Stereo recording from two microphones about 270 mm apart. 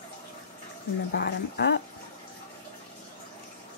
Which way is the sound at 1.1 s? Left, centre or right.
Left.